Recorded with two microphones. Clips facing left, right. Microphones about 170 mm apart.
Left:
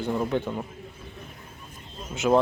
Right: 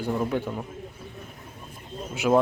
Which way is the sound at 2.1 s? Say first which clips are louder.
Even; 10° right (ahead or behind).